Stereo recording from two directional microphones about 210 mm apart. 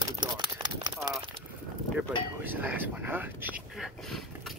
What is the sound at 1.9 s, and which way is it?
Speech, 10° right (ahead or behind).